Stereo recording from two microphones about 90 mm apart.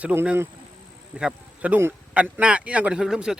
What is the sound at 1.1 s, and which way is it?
Speech, 15° right (ahead or behind).